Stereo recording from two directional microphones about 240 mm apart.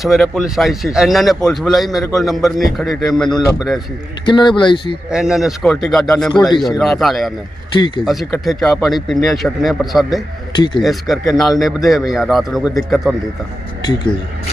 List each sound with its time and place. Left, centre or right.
0.0 s a man's voice: centre
4.3 s speech: centre
5.1 s a man's voice: centre
7.7 s speech: centre
8.0 s a man's voice: centre
13.8 s speech: centre